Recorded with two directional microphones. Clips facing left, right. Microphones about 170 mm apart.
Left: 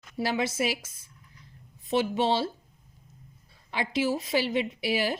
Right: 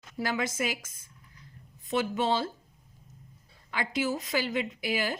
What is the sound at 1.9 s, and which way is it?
Speech, 25° left (ahead or behind).